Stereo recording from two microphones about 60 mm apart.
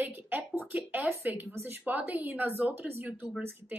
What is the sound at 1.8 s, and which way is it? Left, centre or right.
Speech, right.